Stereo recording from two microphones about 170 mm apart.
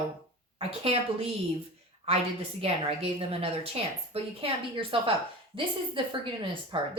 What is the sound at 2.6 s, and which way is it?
A woman's voice, 35° right (ahead or behind).